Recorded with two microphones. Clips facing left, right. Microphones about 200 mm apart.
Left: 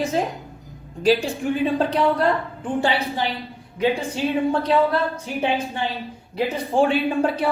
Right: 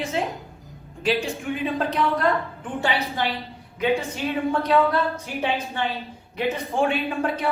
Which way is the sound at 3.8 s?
30° left (ahead or behind).